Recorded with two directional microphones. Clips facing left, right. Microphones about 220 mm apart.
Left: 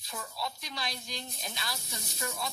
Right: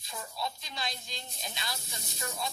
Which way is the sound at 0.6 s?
25° right (ahead or behind).